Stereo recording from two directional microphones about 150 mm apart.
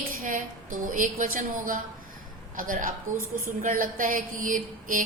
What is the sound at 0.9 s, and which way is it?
A woman's voice, 65° right (ahead or behind).